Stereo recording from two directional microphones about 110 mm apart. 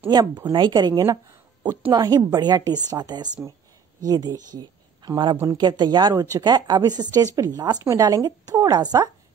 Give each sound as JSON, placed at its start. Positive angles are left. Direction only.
{"t": 0.1, "sound": "speech", "side_deg": -40}